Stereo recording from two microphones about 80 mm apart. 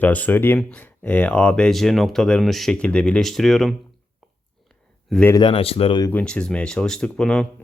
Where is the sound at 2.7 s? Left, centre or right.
Centre.